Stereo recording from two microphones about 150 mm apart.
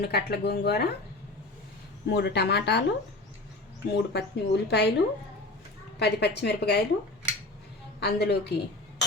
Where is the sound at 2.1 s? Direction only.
90° left.